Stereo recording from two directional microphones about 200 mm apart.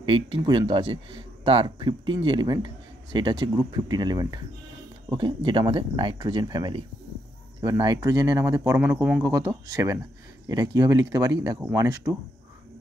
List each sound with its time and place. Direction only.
0.0 s speech: 25° right (ahead or behind)